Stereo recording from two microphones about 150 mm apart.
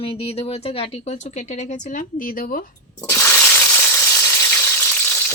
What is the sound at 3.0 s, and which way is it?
Water, 15° left (ahead or behind).